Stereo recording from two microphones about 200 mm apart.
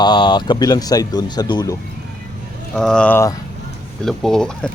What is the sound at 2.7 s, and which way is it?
Speech, 5° left (ahead or behind).